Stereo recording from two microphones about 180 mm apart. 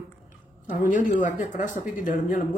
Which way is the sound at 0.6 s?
45° left (ahead or behind).